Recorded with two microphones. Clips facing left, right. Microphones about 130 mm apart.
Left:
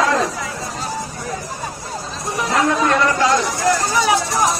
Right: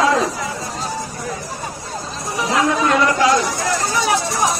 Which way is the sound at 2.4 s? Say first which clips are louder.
Even; centre (ahead or behind).